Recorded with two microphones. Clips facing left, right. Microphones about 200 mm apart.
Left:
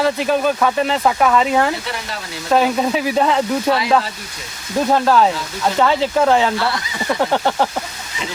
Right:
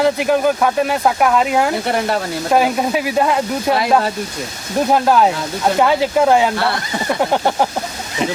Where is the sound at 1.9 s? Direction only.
55° right (ahead or behind).